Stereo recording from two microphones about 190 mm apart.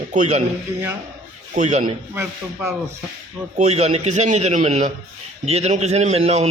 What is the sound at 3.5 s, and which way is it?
A man's voice, 35° right (ahead or behind).